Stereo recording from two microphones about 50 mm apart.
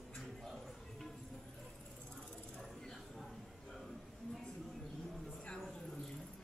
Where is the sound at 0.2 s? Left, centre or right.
Centre.